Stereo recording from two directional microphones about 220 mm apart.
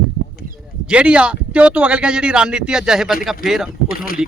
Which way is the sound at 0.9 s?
5° right (ahead or behind).